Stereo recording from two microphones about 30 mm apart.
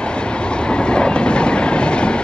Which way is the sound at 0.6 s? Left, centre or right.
Left.